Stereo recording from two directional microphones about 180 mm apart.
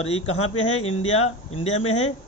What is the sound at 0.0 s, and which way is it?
Speech, 35° left (ahead or behind).